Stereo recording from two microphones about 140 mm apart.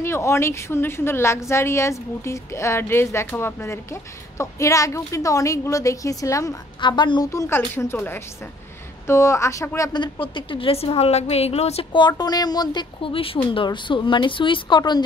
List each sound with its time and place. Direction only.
0.0 s a woman's voice: 20° left (ahead or behind)
7.2 s a woman's voice: 20° left (ahead or behind)